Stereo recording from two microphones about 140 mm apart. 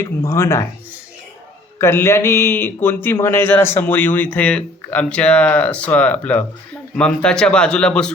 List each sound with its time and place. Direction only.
0.0 s speech: 20° left (ahead or behind)
1.8 s a man's voice: 20° left (ahead or behind)